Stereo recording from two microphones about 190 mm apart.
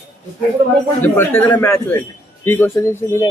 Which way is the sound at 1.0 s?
10° left (ahead or behind).